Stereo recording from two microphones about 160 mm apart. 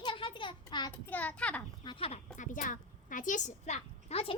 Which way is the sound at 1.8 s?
30° left (ahead or behind).